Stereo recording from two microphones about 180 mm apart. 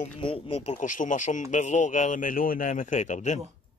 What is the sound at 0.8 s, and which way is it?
Speech, 45° left (ahead or behind).